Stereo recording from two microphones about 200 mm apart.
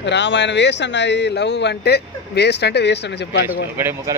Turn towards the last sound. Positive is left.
turn(degrees=-10)  # may be behind; listen again after turning